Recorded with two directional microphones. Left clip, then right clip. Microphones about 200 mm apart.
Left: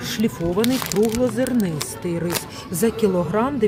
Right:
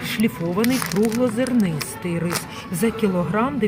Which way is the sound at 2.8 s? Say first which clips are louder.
Left 2 dB; 15° left (ahead or behind).